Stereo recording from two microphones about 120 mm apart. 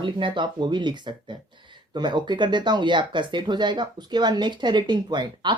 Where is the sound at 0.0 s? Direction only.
45° right (ahead or behind).